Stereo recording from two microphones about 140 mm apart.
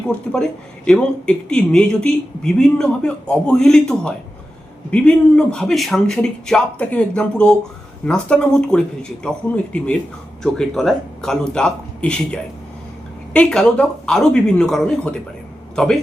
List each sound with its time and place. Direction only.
0.1 s a man's voice: 5° left (ahead or behind)